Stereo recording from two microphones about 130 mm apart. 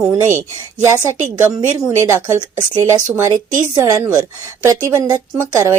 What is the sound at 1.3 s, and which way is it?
A woman's voice, 25° right (ahead or behind).